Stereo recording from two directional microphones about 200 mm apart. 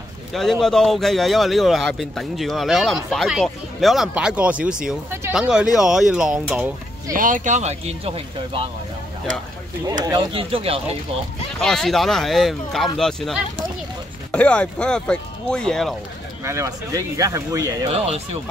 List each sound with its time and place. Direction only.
0.3 s a man's voice: centre (ahead or behind)
7.2 s speech: 40° right (ahead or behind)
10.0 s speech: 25° right (ahead or behind)
11.6 s a man's voice: centre (ahead or behind)
16.4 s speech: 15° right (ahead or behind)
17.8 s speech: 30° right (ahead or behind)